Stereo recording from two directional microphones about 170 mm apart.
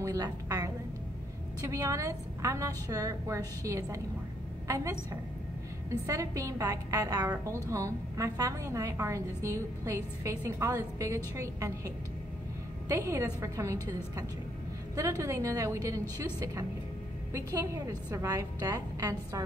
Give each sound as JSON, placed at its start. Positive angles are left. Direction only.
{"t": 0.0, "sound": "a woman's voice", "side_deg": -20}
{"t": 17.3, "sound": "a woman's voice", "side_deg": -20}